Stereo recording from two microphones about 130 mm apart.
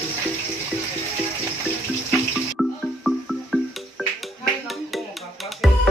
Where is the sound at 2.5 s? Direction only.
Centre (ahead or behind).